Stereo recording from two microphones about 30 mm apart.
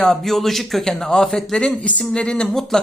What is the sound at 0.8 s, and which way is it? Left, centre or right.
Speech, centre.